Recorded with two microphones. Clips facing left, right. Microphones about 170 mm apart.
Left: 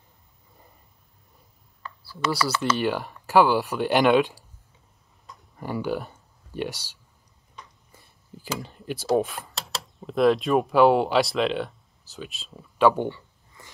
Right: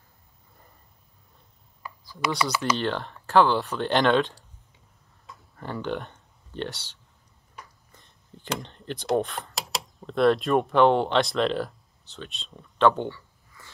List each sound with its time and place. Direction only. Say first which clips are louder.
1.8 s a sound: left 1 dB; 10° right (ahead or behind)
2.5 s speech: left 1 dB; 15° right (ahead or behind)
2.8 s speech: left 3 dB; 10° left (ahead or behind)
5.6 s speech: left 3 dB; 10° left (ahead or behind)